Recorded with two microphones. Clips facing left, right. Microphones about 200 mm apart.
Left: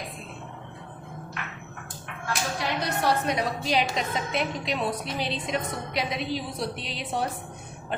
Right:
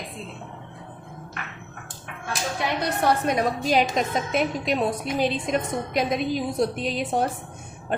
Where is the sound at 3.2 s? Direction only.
50° right (ahead or behind).